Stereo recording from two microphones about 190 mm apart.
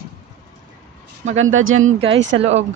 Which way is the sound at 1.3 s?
90° right.